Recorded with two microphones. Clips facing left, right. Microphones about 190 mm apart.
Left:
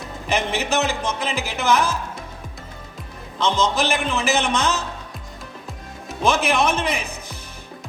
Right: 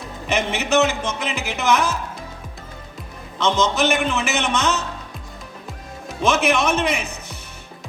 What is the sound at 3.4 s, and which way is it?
Speech, 35° left (ahead or behind).